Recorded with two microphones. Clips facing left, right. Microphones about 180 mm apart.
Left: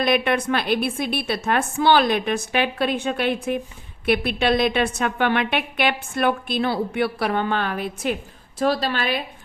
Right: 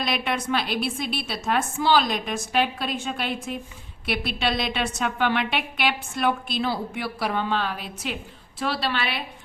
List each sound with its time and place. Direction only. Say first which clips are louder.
0.0 s a woman's voice: left 7 dB; 55° left (ahead or behind)
8.5 s a woman's voice: left 5 dB; 40° left (ahead or behind)